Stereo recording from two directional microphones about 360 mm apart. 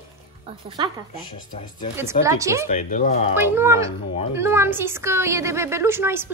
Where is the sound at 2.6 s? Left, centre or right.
Left.